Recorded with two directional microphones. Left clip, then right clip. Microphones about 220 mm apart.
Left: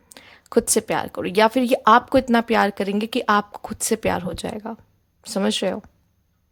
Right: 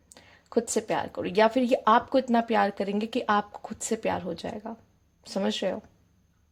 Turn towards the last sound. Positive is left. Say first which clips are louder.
# left 6 dB
turn(degrees=20)  # may be behind; listen again after turning